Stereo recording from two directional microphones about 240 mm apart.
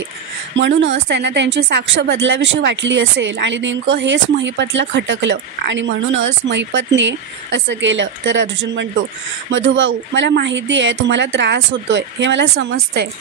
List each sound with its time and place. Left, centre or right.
0.6 s speech: right